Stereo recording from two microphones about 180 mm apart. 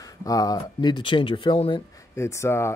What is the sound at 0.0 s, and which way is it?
Speech, 20° left (ahead or behind).